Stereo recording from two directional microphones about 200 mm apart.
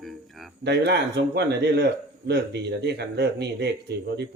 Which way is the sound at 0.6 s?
55° right (ahead or behind).